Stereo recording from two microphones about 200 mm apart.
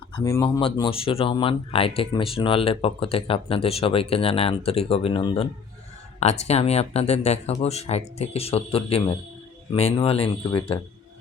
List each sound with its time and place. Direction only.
0.1 s speech: 20° left (ahead or behind)